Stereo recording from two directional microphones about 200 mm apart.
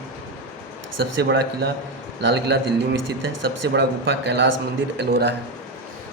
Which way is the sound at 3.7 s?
60° right (ahead or behind).